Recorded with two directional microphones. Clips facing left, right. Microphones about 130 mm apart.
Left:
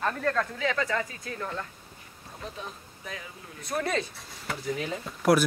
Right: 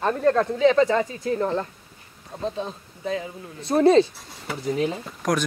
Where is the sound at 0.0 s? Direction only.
25° right (ahead or behind).